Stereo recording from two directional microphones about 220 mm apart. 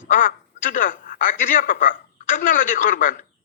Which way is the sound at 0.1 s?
35° left (ahead or behind).